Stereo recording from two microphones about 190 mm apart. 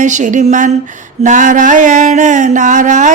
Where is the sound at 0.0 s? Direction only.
40° right (ahead or behind).